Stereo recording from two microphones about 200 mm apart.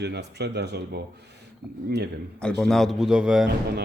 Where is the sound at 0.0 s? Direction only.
55° right (ahead or behind).